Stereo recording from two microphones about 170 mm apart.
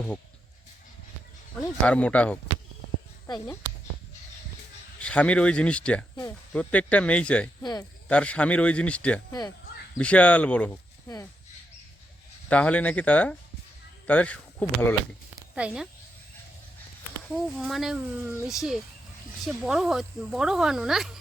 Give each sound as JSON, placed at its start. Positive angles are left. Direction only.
{"t": 1.5, "sound": "a man's voice", "side_deg": 5}
{"t": 3.2, "sound": "speech", "side_deg": 25}
{"t": 4.9, "sound": "a man's voice", "side_deg": 5}
{"t": 7.6, "sound": "speech", "side_deg": 25}
{"t": 8.0, "sound": "a man's voice", "side_deg": 5}
{"t": 12.5, "sound": "a man's voice", "side_deg": 5}
{"t": 15.5, "sound": "speech", "side_deg": -5}
{"t": 17.2, "sound": "speech", "side_deg": 0}
{"t": 19.6, "sound": "speech", "side_deg": 0}